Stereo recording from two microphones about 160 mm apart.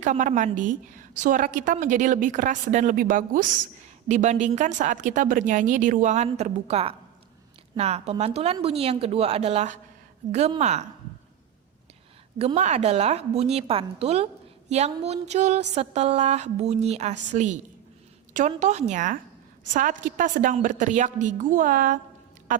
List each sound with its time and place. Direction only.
0.0 s a woman's voice: 50° right (ahead or behind)
4.1 s a woman's voice: 45° right (ahead or behind)
12.4 s a woman's voice: 45° right (ahead or behind)